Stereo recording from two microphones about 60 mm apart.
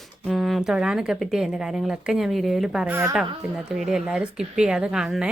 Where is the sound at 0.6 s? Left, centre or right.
Centre.